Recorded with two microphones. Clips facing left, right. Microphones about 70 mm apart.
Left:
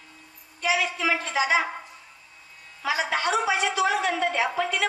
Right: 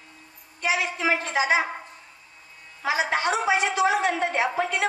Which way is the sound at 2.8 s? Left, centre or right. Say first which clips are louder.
Right 1 dB; right.